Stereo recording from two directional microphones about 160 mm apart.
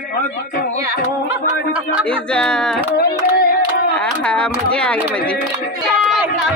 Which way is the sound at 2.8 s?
75° left (ahead or behind).